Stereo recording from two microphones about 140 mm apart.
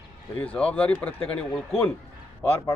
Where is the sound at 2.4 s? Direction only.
15° left (ahead or behind).